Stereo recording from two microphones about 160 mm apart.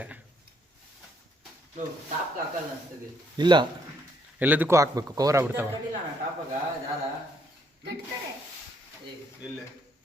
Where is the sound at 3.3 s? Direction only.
30° right (ahead or behind).